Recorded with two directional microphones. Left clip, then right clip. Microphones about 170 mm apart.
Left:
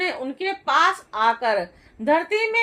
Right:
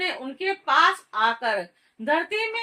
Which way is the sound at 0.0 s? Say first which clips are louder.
Left 2 dB; 50° left (ahead or behind).